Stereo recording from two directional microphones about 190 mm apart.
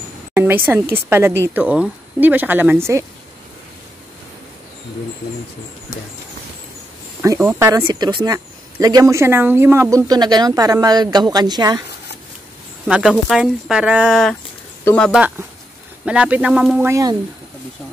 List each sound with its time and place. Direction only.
0.3 s speech: 10° right (ahead or behind)
7.3 s speech: 10° right (ahead or behind)
12.8 s speech: centre (ahead or behind)
14.9 s speech: 10° left (ahead or behind)
15.1 s speech: 10° right (ahead or behind)
16.9 s speech: 20° right (ahead or behind)